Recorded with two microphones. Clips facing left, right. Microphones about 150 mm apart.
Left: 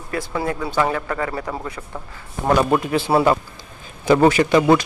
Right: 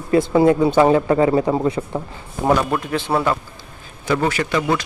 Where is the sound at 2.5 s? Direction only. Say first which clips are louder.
Left 3 dB; 10° left (ahead or behind).